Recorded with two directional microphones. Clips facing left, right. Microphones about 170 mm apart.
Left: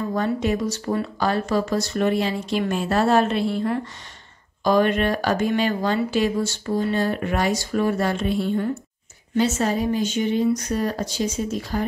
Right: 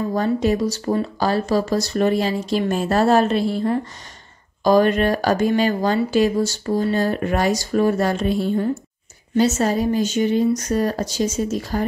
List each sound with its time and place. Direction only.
0.1 s speech: 35° right (ahead or behind)